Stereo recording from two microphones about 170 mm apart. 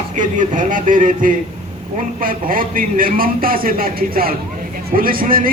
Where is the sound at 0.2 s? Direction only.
50° right (ahead or behind).